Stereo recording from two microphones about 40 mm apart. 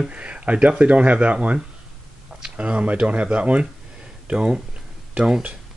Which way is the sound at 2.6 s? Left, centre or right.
Right.